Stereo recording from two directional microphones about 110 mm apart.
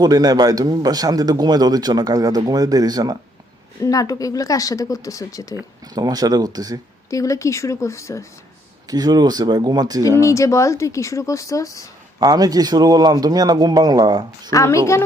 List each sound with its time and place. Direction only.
0.0 s a man's voice: 35° right (ahead or behind)
3.8 s speech: 30° left (ahead or behind)
5.8 s a man's voice: 35° right (ahead or behind)
7.1 s speech: 30° left (ahead or behind)
8.9 s a man's voice: 35° right (ahead or behind)
10.2 s speech: 30° left (ahead or behind)
12.2 s a man's voice: 35° right (ahead or behind)
14.5 s speech: 30° left (ahead or behind)